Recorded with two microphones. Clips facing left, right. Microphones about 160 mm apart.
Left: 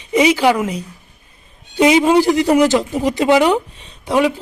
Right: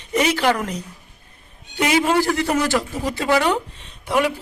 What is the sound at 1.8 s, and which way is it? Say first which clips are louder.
Speech: left 7 dB; 20° left (ahead or behind).